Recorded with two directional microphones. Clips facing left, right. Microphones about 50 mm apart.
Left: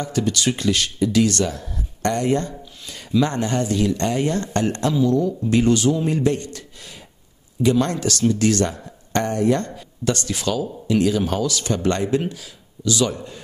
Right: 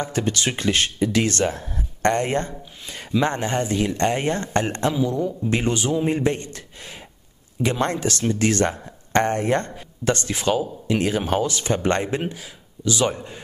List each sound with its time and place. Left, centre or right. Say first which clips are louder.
0.0 s speech: left 2 dB; right
7.7 s speech: left 2 dB; right